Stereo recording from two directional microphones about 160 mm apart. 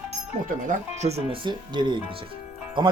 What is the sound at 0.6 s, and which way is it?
Speech, 45° right (ahead or behind).